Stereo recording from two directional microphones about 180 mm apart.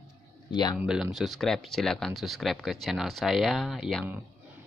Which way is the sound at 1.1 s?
Centre (ahead or behind).